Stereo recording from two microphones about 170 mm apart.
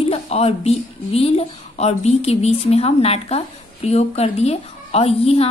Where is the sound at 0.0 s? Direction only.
35° left (ahead or behind).